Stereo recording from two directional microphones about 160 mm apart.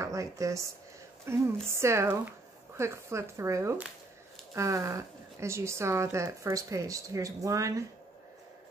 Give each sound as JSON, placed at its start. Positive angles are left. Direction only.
{"t": 0.0, "sound": "speech", "side_deg": -20}